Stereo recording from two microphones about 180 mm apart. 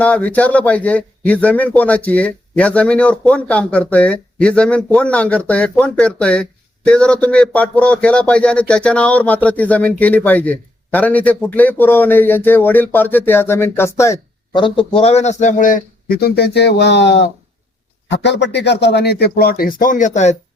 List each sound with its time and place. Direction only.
0.0 s a man's voice: 10° left (ahead or behind)
14.9 s speech: 35° left (ahead or behind)